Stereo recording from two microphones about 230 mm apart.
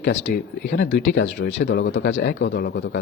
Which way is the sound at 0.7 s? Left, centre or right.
Left.